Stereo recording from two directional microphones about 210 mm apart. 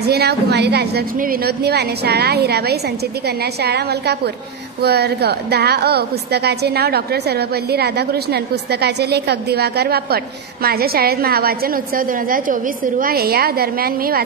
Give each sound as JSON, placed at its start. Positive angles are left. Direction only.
{"t": 0.0, "sound": "a woman's voice", "side_deg": -50}